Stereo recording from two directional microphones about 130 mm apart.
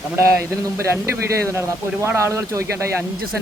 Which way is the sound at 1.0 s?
20° right (ahead or behind).